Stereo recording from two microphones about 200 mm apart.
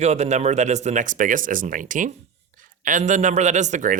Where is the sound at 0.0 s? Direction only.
35° right (ahead or behind).